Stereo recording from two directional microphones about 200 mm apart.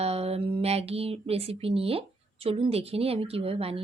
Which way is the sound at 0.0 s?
30° right (ahead or behind).